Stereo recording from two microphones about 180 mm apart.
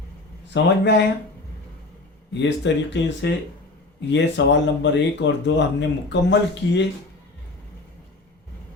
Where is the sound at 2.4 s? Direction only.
80° left.